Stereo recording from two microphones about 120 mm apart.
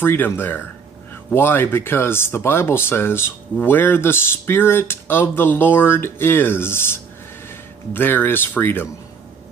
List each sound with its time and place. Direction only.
0.0 s speech: 20° left (ahead or behind)